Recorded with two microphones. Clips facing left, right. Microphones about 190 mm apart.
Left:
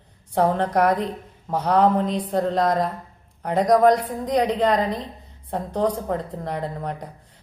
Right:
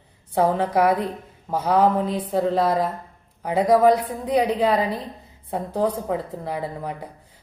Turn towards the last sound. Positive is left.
turn(degrees=-5)  # may be behind; listen again after turning